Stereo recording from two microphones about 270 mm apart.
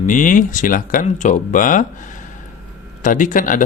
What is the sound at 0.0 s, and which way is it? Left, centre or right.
Speech, left.